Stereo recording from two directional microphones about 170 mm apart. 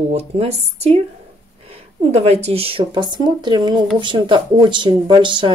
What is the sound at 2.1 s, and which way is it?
Speech, 40° right (ahead or behind).